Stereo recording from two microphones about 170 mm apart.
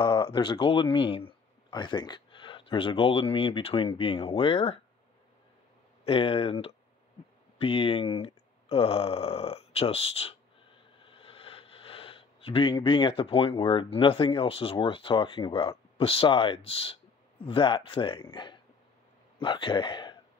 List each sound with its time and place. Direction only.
0.0 s speech: 30° left (ahead or behind)
6.0 s speech: 35° left (ahead or behind)